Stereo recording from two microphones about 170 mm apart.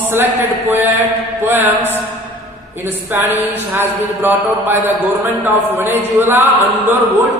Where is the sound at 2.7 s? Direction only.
10° right (ahead or behind).